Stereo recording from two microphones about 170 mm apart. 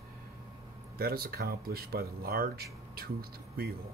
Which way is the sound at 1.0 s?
60° right (ahead or behind).